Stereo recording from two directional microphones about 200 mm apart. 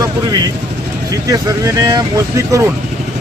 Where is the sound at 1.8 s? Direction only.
20° right (ahead or behind).